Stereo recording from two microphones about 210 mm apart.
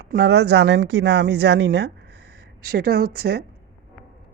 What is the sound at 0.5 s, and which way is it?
Speech, 65° right (ahead or behind).